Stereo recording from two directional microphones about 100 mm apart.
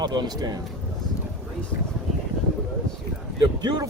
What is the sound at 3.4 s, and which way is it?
Speech, 45° right (ahead or behind).